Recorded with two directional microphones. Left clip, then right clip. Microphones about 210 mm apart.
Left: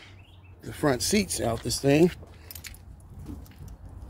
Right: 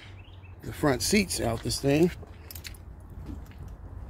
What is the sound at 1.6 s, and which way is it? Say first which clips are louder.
Speech: left 3 dB; 20° left (ahead or behind).